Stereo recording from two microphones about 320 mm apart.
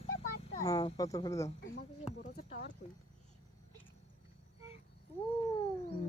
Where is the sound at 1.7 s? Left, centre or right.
Left.